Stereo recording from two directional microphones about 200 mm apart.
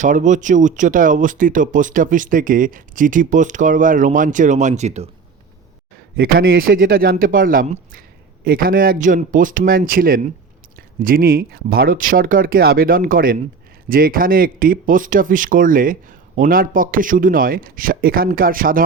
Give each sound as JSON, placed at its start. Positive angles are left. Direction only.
{"t": 0.0, "sound": "speech", "side_deg": -40}
{"t": 6.1, "sound": "speech", "side_deg": -50}